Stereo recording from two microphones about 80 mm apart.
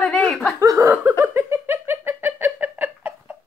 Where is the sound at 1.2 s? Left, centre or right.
Right.